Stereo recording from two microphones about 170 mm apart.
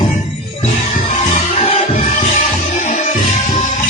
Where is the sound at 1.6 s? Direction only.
35° left (ahead or behind).